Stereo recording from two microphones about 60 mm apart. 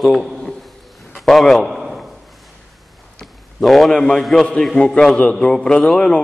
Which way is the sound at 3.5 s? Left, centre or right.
Centre.